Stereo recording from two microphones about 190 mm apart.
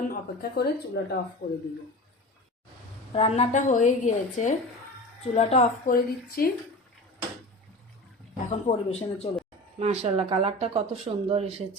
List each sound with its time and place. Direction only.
0.1 s a woman's voice: 55° left (ahead or behind)
3.1 s a woman's voice: 35° left (ahead or behind)
5.9 s a woman's voice: 50° left (ahead or behind)
8.4 s a woman's voice: 35° left (ahead or behind)
9.7 s speech: 35° right (ahead or behind)